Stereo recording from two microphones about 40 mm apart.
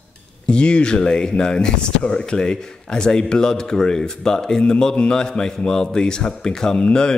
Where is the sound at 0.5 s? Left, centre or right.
Left.